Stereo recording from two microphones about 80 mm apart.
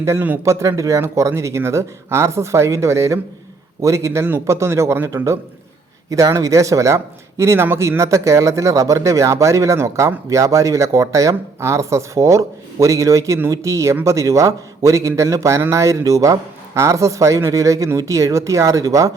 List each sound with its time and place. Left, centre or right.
0.0 s speech: right